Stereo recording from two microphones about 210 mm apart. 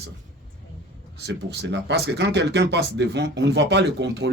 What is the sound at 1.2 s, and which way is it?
Speech, 55° right (ahead or behind).